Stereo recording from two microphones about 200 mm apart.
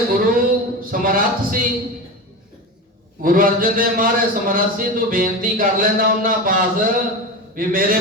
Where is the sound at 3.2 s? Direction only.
45° right (ahead or behind).